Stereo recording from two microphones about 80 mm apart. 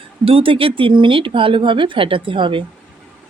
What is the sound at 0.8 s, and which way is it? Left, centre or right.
A woman's voice, right.